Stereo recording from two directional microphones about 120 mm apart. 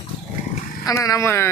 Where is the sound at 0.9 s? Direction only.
30° left (ahead or behind).